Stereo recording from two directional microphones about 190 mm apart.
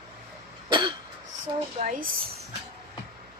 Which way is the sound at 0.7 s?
25° right (ahead or behind).